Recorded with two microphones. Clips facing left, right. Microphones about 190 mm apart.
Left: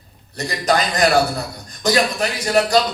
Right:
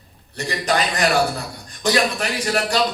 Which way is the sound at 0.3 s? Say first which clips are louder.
Left 2 dB; 35° left (ahead or behind).